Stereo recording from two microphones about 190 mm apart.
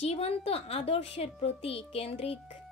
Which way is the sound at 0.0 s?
35° left (ahead or behind).